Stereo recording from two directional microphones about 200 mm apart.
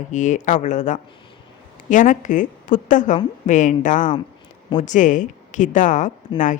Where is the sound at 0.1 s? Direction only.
40° left (ahead or behind).